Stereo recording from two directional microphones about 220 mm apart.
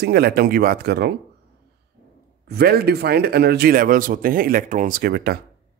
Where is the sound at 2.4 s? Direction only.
45° right (ahead or behind).